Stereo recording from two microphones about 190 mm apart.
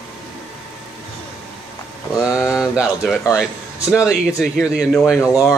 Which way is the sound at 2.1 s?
15° left (ahead or behind).